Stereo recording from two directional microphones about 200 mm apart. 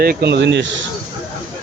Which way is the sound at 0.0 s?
50° right (ahead or behind).